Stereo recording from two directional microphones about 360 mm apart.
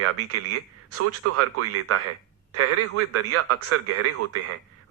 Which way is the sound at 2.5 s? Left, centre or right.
Right.